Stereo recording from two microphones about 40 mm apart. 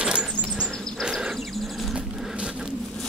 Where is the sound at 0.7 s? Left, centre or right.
Centre.